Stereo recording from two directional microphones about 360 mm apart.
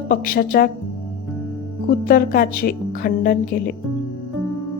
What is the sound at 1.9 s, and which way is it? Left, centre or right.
Speech, left.